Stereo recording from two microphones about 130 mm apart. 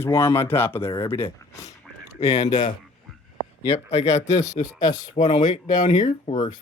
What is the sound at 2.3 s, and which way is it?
Speech, 55° left (ahead or behind).